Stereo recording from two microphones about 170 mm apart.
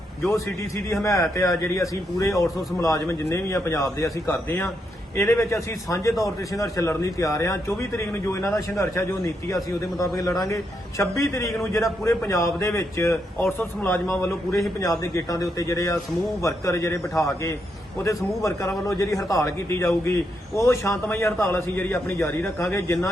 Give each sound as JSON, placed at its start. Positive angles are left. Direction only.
{"t": 0.3, "sound": "a man's voice", "side_deg": 15}
{"t": 9.8, "sound": "a man's voice", "side_deg": 20}
{"t": 18.9, "sound": "a man's voice", "side_deg": 20}